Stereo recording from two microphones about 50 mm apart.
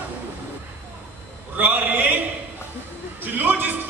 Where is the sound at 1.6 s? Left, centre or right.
Right.